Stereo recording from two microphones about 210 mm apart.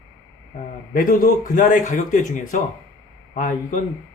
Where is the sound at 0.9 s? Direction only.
40° left (ahead or behind).